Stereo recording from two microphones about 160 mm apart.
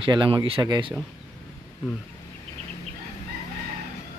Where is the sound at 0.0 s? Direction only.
30° right (ahead or behind).